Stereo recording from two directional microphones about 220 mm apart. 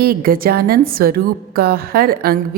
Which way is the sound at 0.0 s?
40° right (ahead or behind).